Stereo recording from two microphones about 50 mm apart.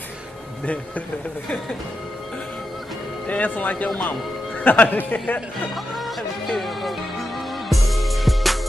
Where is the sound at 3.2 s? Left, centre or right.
Left.